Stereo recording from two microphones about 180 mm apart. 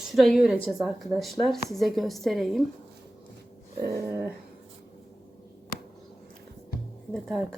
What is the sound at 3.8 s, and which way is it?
Dog, 60° right (ahead or behind).